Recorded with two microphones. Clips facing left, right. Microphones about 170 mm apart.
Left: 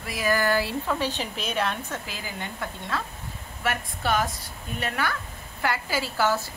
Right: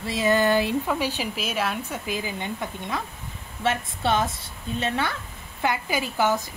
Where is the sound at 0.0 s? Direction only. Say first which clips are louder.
Right 4 dB; 25° right (ahead or behind).